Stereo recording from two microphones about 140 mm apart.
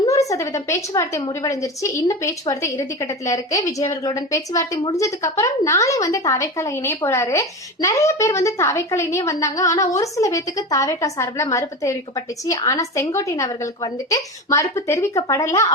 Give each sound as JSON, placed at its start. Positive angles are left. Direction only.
{"t": 0.3, "sound": "a woman's voice", "side_deg": 20}